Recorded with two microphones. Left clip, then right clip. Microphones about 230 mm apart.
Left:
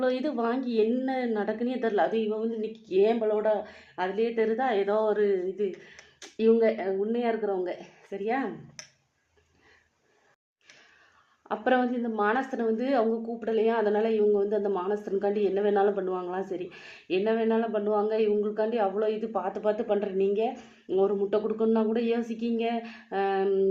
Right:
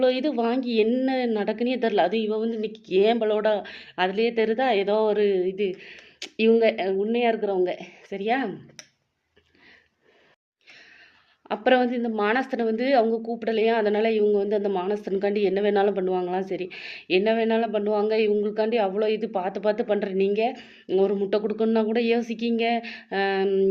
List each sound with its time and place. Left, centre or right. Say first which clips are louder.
0.0 s a woman's voice: right 5 dB; right
11.4 s a woman's voice: right 5 dB; right